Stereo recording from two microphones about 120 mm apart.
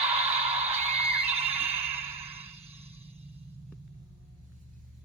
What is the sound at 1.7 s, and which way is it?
Music, 55° right (ahead or behind).